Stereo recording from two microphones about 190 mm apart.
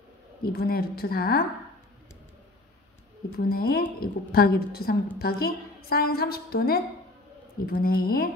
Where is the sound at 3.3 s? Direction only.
55° left (ahead or behind).